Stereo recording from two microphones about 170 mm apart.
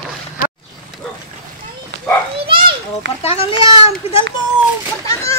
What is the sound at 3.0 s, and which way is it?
Speech, 90° right.